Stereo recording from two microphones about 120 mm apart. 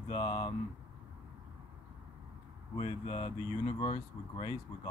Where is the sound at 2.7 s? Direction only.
45° left (ahead or behind).